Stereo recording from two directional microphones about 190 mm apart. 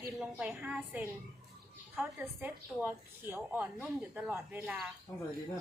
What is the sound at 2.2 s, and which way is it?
A woman's voice, 10° right (ahead or behind).